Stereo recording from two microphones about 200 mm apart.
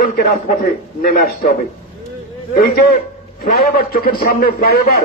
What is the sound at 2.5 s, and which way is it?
A man's voice, 50° left (ahead or behind).